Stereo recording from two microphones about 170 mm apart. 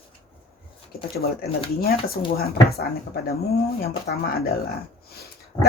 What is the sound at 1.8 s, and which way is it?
Speech, 60° left (ahead or behind).